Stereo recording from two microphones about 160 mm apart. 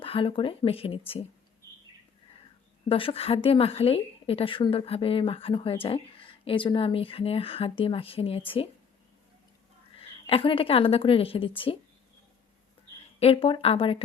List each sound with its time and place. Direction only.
0.0 s a woman's voice: 35° left (ahead or behind)
2.9 s a woman's voice: 35° left (ahead or behind)
10.0 s a woman's voice: 35° left (ahead or behind)
13.1 s a woman's voice: 35° left (ahead or behind)